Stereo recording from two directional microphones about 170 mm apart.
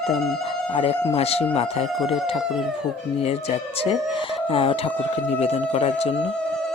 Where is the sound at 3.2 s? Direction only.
40° left (ahead or behind).